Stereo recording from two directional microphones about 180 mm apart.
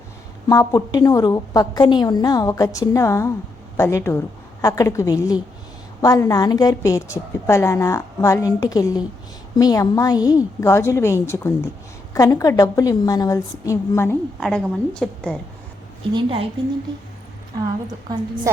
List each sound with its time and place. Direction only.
0.4 s a woman's voice: 20° left (ahead or behind)
14.3 s a woman's voice: centre (ahead or behind)
16.1 s a woman's voice: 30° right (ahead or behind)
18.5 s a woman's voice: 15° right (ahead or behind)